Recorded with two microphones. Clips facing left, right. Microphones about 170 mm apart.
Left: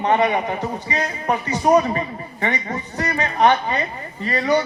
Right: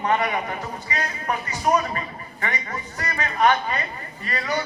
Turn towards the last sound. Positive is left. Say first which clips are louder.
# left 8 dB
turn(degrees=30)  # may be behind; listen again after turning